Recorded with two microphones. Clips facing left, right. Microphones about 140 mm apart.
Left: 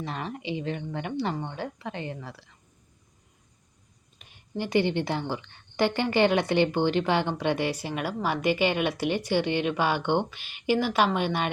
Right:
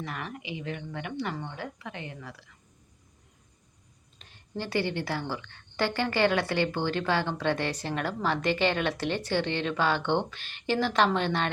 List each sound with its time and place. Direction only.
0.0 s speech: 25° left (ahead or behind)
4.2 s a woman's voice: 15° left (ahead or behind)